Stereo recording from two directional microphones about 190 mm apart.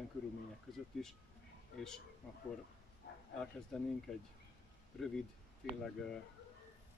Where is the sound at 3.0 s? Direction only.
65° left (ahead or behind).